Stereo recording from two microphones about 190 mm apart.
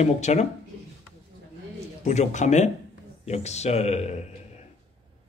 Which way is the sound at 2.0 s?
40° left (ahead or behind).